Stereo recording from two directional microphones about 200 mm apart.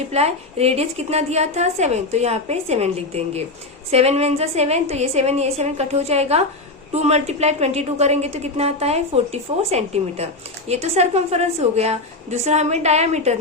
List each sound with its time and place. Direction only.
0.1 s a woman's voice: 30° right (ahead or behind)